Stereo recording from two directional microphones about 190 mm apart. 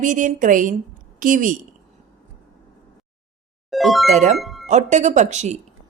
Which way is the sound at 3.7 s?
Centre (ahead or behind).